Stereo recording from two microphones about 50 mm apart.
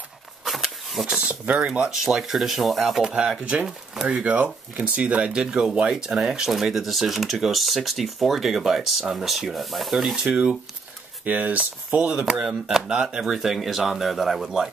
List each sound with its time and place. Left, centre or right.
0.5 s a sound: centre
1.0 s speech: right
2.0 s speech: centre
3.0 s speech: centre
4.1 s speech: right; by 10.2 s centre
10.2 s speech: right